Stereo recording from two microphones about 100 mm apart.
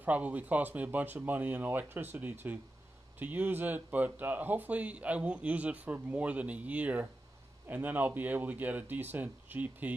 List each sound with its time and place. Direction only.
0.0 s speech: 15° right (ahead or behind)